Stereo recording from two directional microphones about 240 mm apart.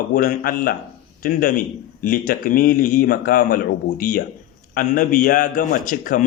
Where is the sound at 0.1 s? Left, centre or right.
Left.